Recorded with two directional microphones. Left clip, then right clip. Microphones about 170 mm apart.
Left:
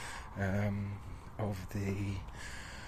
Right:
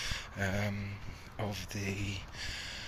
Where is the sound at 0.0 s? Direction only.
30° left (ahead or behind).